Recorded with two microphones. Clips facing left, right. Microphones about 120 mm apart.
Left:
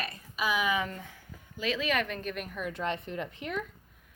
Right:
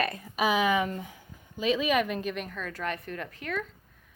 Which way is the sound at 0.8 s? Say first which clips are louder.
Right 5 dB; 20° right (ahead or behind).